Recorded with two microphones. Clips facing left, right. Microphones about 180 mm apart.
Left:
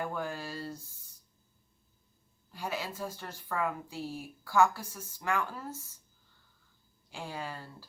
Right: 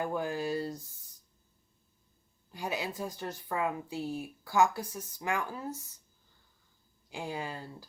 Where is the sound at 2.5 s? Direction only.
20° right (ahead or behind).